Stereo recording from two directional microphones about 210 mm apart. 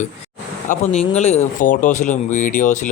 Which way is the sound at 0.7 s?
30° left (ahead or behind).